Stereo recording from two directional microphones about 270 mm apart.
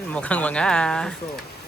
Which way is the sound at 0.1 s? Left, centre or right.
Centre.